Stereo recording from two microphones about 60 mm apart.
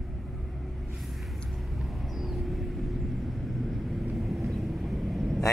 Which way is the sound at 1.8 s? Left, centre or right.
Centre.